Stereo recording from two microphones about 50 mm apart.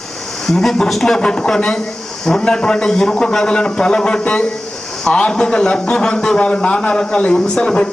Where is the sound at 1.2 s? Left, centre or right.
Centre.